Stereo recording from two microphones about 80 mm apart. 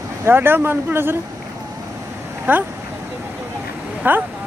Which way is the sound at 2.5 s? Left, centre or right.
Right.